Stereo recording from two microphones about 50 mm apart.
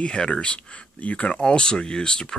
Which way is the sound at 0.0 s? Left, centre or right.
Left.